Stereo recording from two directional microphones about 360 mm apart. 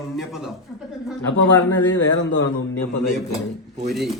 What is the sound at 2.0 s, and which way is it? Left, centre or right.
Speech, left.